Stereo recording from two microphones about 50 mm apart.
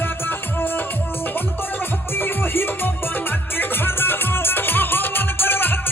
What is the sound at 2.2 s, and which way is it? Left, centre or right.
Music, left.